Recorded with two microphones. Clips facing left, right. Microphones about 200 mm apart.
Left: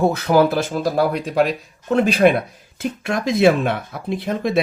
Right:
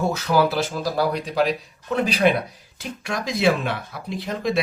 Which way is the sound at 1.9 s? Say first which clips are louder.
Left 5 dB; 50° left (ahead or behind).